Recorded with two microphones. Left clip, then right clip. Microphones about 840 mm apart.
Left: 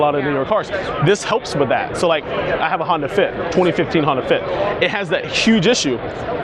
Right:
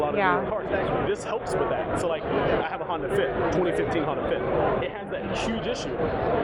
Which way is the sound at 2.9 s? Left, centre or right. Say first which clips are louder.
Left 8 dB; left.